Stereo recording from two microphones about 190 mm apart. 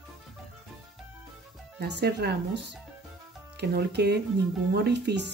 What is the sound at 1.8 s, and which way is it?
A woman's voice, 60° right (ahead or behind).